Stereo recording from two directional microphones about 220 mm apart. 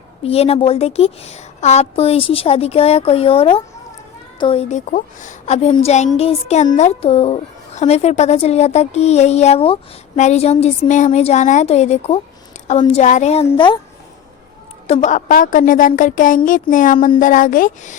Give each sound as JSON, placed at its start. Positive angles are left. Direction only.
{"t": 0.2, "sound": "a woman's voice", "side_deg": 25}
{"t": 14.8, "sound": "a woman's voice", "side_deg": 30}